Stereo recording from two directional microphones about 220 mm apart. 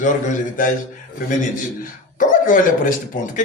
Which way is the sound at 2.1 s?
35° left (ahead or behind).